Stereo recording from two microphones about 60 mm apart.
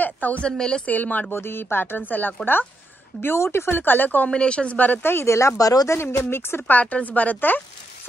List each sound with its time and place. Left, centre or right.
0.0 s a sound: left
0.5 s speech: centre
0.8 s speech: left
1.3 s speech: left
4.3 s speech: centre
5.0 s speech: left
5.6 s speech: left
5.9 s speech: left
6.7 s speech: left